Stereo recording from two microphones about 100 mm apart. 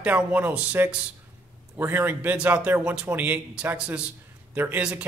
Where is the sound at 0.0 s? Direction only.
15° right (ahead or behind).